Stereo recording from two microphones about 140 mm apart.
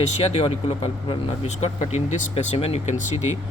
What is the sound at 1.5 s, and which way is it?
Speech, 55° left (ahead or behind).